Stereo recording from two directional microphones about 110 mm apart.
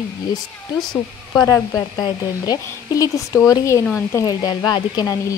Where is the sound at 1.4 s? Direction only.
30° left (ahead or behind).